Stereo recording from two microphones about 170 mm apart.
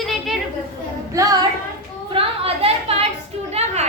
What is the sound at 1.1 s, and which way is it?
Child singing, 20° right (ahead or behind).